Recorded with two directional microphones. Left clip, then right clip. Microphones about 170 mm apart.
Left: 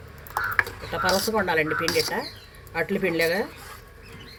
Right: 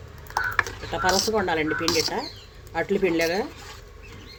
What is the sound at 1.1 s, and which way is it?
Speech, 15° right (ahead or behind).